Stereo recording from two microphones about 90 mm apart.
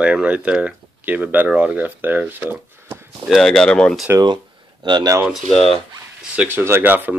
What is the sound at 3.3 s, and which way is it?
Speech, 5° left (ahead or behind).